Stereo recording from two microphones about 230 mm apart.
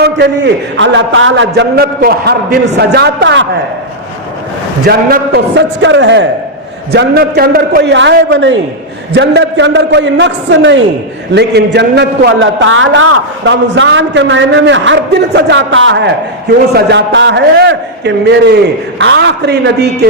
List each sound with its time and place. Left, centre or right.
0.0 s a man's voice: right
4.9 s a man's voice: right